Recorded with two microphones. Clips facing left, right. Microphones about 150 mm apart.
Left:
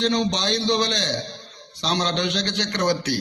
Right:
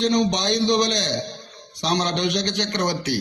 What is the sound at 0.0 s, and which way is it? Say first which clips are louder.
A man's voice: right 2 dB; 20° right (ahead or behind).